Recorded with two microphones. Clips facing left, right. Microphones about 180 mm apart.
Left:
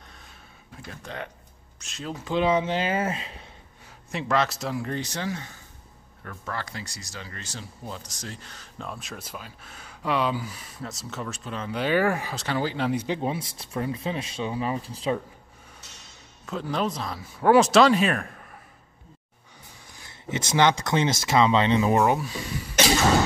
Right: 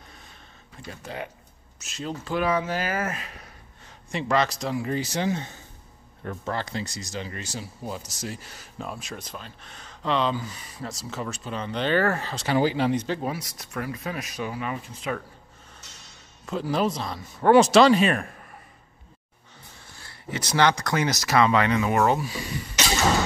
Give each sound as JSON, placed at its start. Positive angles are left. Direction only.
{"t": 0.8, "sound": "speech", "side_deg": -5}
{"t": 2.2, "sound": "speech", "side_deg": 20}
{"t": 3.8, "sound": "speech", "side_deg": 0}
{"t": 5.2, "sound": "speech", "side_deg": -25}
{"t": 12.4, "sound": "speech", "side_deg": -10}
{"t": 12.8, "sound": "speech", "side_deg": 10}
{"t": 13.2, "sound": "speech", "side_deg": 25}
{"t": 16.4, "sound": "speech", "side_deg": -5}
{"t": 19.9, "sound": "speech", "side_deg": 20}